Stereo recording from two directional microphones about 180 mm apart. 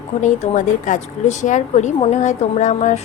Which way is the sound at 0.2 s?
45° left (ahead or behind).